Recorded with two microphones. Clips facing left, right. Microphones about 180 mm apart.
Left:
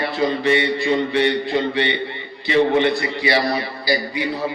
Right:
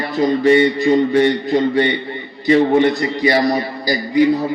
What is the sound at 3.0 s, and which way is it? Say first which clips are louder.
A man's voice: right 4 dB; 45° right (ahead or behind).